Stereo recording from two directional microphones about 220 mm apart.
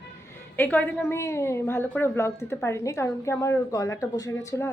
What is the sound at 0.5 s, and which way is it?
A woman's voice, 5° left (ahead or behind).